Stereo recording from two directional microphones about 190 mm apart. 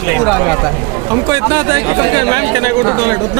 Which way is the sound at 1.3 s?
20° right (ahead or behind).